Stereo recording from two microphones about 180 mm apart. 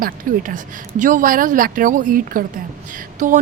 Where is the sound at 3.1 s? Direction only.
45° right (ahead or behind).